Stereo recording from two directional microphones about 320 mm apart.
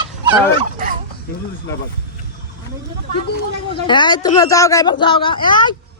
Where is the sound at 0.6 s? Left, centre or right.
Right.